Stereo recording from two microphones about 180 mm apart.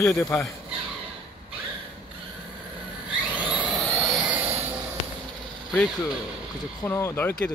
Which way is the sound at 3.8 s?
5° left (ahead or behind).